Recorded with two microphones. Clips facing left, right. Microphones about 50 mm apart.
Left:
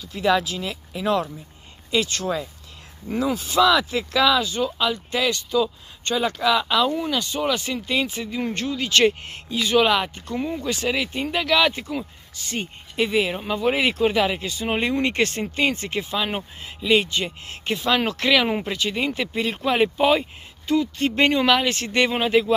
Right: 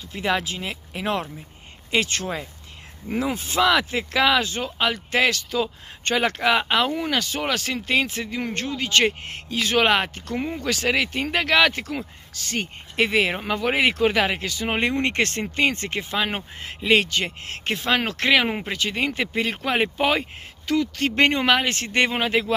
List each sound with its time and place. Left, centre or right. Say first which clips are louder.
0.1 s speech: left 4 dB; right
4.4 s speech: left 2 dB; right
4.6 s speech: even; right
6.0 s speech: right 1 dB; right
6.3 s speech: even; right
7.4 s speech: left 1 dB; right
7.9 s speech: right 2 dB; right
10.3 s speech: left 1 dB; right
10.6 s speech: right 2 dB; right
14.4 s speech: even; right
14.7 s speech: left 1 dB; right
20.6 s speech: left 1 dB; right
21.1 s speech: left 1 dB; right